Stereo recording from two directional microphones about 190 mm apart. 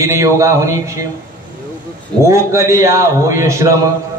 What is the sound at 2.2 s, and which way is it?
A man's voice, 15° right (ahead or behind).